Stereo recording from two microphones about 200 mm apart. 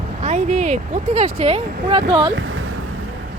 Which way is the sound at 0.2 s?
35° right (ahead or behind).